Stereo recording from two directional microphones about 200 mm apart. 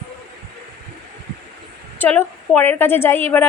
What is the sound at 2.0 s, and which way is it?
Speech, 10° left (ahead or behind).